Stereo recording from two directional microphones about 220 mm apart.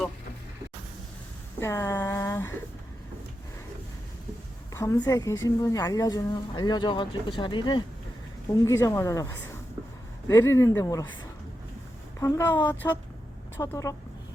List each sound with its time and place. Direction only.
1.5 s speech: 10° left (ahead or behind)
4.7 s a woman's voice: 15° left (ahead or behind)
12.2 s a woman's voice: 15° left (ahead or behind)